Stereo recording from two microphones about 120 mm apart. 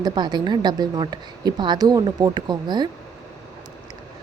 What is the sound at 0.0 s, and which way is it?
A woman's voice, 35° right (ahead or behind).